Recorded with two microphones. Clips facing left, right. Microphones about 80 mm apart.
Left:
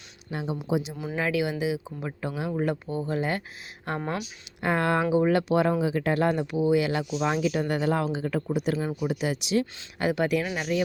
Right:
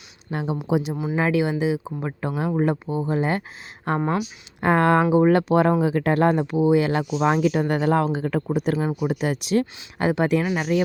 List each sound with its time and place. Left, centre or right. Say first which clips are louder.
0.3 s speech: right 4 dB; right
0.9 s speech: right 5 dB; right
2.6 s speech: right 5 dB; right
10.0 s speech: right 4 dB; right
10.4 s speech: right 6 dB; right